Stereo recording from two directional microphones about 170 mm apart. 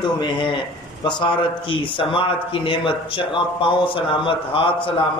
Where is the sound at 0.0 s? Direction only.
30° left (ahead or behind).